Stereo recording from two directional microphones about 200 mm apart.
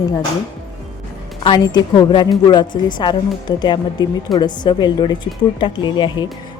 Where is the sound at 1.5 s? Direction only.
20° left (ahead or behind).